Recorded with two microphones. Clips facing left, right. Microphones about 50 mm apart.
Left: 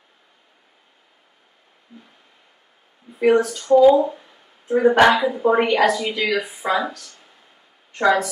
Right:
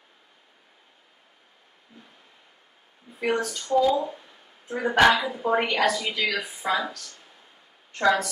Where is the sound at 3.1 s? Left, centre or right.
Centre.